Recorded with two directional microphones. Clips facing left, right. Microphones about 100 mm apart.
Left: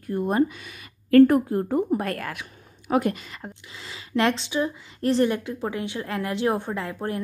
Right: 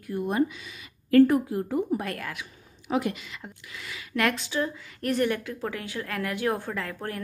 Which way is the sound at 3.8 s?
25° left (ahead or behind).